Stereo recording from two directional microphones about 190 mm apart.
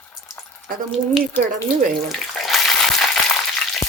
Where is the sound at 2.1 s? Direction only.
Centre (ahead or behind).